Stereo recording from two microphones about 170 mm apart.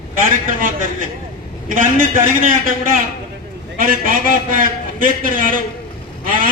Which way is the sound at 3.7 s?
55° right (ahead or behind).